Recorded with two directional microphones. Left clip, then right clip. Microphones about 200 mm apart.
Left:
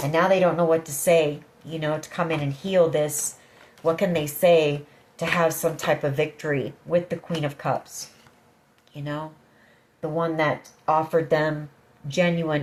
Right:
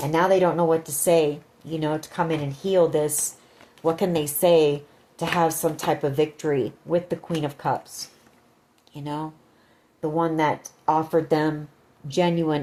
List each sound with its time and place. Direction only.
0.1 s a woman's voice: 45° right (ahead or behind)